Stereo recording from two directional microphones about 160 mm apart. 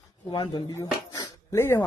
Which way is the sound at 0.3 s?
30° left (ahead or behind).